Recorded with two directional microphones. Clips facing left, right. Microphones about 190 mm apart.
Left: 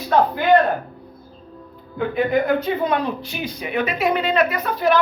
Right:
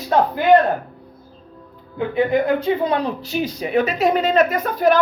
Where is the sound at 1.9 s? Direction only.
25° right (ahead or behind).